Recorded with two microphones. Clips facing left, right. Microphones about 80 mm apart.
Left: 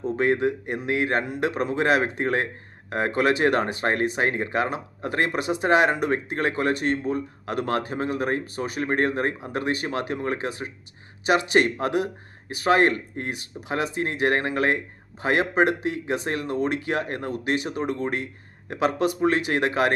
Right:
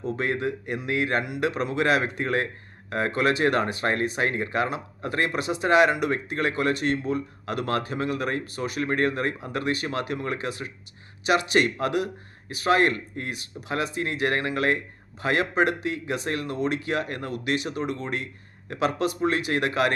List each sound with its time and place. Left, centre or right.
0.0 s speech: left